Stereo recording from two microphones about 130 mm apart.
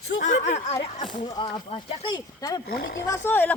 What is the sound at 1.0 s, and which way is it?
Speech, 35° left (ahead or behind).